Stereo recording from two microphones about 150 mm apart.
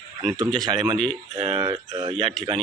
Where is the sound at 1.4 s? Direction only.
40° right (ahead or behind).